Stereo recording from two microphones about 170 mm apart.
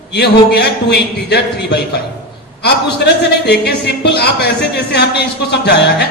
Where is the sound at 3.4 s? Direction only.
75° left (ahead or behind).